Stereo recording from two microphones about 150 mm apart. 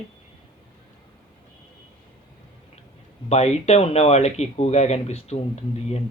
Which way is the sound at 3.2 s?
45° left (ahead or behind).